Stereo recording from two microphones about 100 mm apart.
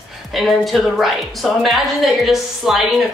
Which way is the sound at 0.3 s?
Centre (ahead or behind).